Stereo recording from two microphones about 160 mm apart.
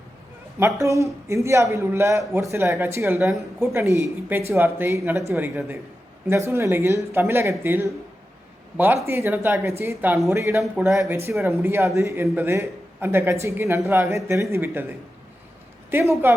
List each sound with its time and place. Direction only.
0.6 s a man's voice: 20° right (ahead or behind)
6.2 s a man's voice: 15° right (ahead or behind)
9.0 s a man's voice: 15° right (ahead or behind)
15.9 s a man's voice: 15° right (ahead or behind)